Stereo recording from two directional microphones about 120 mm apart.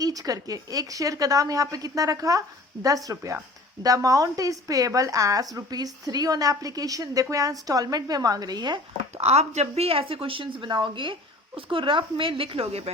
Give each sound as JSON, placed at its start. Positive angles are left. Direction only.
{"t": 0.0, "sound": "a woman's voice", "side_deg": -30}
{"t": 9.1, "sound": "a woman's voice", "side_deg": -60}